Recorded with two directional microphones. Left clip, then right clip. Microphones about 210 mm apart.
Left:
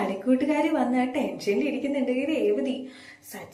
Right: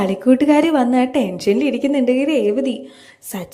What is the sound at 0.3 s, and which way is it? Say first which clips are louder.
A woman's voice: right 11 dB; 55° right (ahead or behind).